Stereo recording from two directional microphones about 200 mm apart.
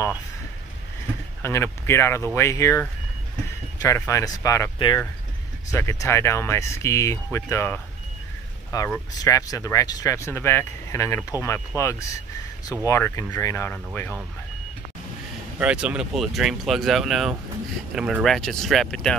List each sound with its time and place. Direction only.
1.4 s speech: 15° left (ahead or behind)
3.8 s speech: 15° left (ahead or behind)
15.6 s speech: 5° right (ahead or behind)